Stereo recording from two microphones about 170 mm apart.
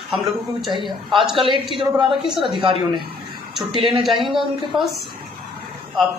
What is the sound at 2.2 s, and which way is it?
Speech, centre (ahead or behind).